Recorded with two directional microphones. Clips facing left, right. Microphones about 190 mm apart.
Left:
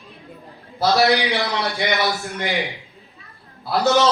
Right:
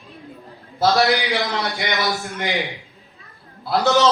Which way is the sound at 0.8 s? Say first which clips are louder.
Even; centre (ahead or behind).